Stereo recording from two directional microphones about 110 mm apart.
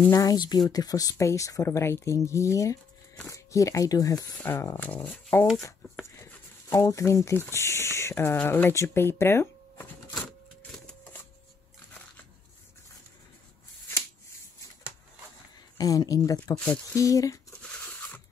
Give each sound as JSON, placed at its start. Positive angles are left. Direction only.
{"t": 0.1, "sound": "speech", "side_deg": 35}
{"t": 4.4, "sound": "speech", "side_deg": 20}
{"t": 10.9, "sound": "printer", "side_deg": 15}
{"t": 15.8, "sound": "speech", "side_deg": 35}
{"t": 16.5, "sound": "speech", "side_deg": 15}
{"t": 16.9, "sound": "speech", "side_deg": 30}
{"t": 17.5, "sound": "a sound", "side_deg": 10}